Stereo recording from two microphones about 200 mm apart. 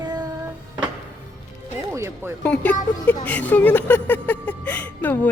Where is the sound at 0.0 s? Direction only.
20° right (ahead or behind).